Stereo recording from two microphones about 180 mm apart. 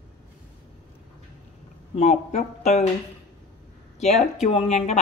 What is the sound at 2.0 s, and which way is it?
Speech, 40° left (ahead or behind).